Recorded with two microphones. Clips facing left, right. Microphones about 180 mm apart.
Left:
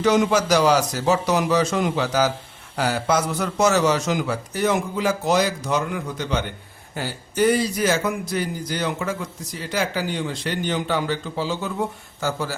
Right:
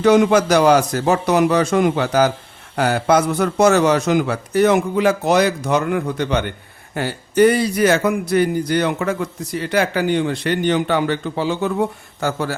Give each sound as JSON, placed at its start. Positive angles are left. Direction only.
{"t": 0.0, "sound": "a man's voice", "side_deg": -55}